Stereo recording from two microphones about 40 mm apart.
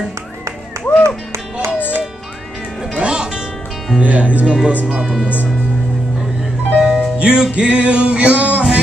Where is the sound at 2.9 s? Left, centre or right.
Right.